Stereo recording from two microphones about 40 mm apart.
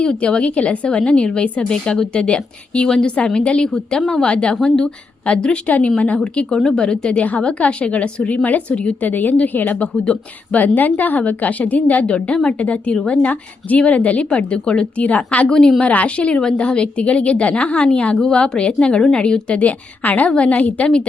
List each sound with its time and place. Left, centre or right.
0.0 s a woman's voice: left
5.6 s a woman's voice: left
6.5 s speech: centre
6.8 s a woman's voice: left
8.7 s a woman's voice: left
9.0 s a woman's voice: left
10.6 s a woman's voice: left
12.0 s a woman's voice: left
15.0 s a woman's voice: left
15.4 s speech: centre
15.8 s a woman's voice: left
20.1 s a woman's voice: left